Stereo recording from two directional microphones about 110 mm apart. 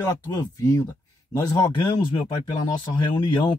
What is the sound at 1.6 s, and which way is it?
Speech, 45° left (ahead or behind).